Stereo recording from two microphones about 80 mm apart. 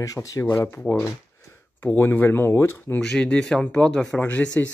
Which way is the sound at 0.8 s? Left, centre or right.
Left.